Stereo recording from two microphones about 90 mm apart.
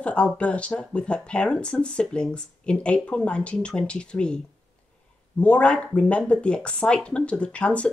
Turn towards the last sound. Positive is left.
turn(degrees=15)  # may be behind; listen again after turning